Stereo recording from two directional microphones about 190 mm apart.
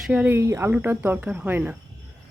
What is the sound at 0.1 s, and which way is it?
Speech, 10° right (ahead or behind).